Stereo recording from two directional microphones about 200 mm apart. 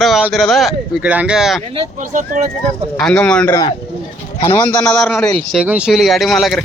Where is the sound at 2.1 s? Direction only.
40° right (ahead or behind).